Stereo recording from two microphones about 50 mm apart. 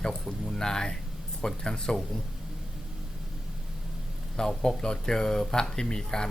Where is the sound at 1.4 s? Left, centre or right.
Centre.